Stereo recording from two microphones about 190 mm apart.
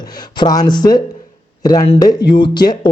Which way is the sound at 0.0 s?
20° left (ahead or behind).